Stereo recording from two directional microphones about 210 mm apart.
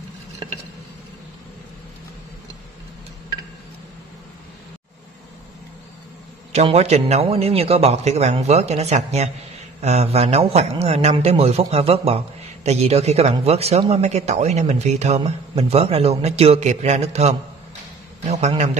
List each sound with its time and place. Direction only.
6.5 s a man's voice: 30° right (ahead or behind)